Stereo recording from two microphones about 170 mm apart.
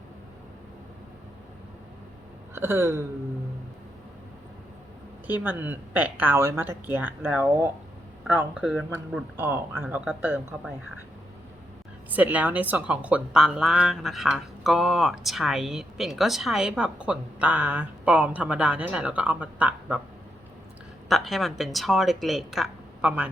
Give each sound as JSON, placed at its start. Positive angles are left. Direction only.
{"t": 2.6, "sound": "speech", "side_deg": -15}
{"t": 5.2, "sound": "speech", "side_deg": -10}
{"t": 12.1, "sound": "a woman's voice", "side_deg": -10}
{"t": 21.1, "sound": "a woman's voice", "side_deg": 0}